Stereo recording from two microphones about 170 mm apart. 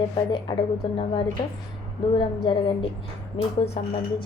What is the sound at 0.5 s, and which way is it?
Speech, 30° left (ahead or behind).